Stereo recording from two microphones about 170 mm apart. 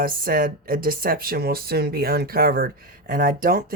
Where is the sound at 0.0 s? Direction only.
55° right (ahead or behind).